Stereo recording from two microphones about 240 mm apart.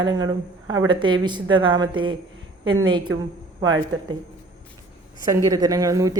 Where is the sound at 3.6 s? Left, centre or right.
Right.